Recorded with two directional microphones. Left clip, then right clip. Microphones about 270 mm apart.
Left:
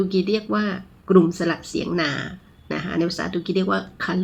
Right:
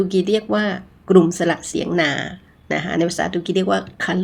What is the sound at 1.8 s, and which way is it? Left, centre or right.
Speech, centre.